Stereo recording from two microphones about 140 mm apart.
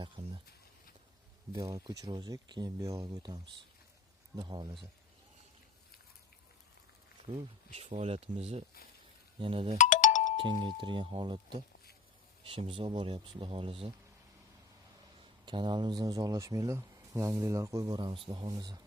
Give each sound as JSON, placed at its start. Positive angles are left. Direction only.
{"t": 0.2, "sound": "speech", "side_deg": -45}
{"t": 1.5, "sound": "speech", "side_deg": -25}
{"t": 4.4, "sound": "speech", "side_deg": -35}
{"t": 7.8, "sound": "speech", "side_deg": -50}
{"t": 9.7, "sound": "music", "side_deg": 60}
{"t": 10.4, "sound": "speech", "side_deg": -35}
{"t": 15.4, "sound": "speech", "side_deg": -35}